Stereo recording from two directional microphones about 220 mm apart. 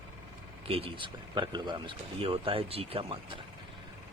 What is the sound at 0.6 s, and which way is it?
Speech, 25° right (ahead or behind).